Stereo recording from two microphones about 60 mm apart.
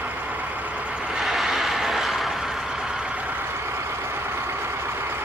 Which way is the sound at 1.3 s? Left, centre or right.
Centre.